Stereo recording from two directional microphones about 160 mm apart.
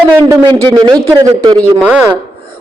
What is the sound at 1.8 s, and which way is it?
Chopping, 10° right (ahead or behind).